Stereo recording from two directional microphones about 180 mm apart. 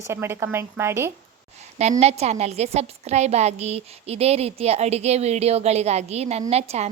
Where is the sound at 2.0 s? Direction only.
35° right (ahead or behind).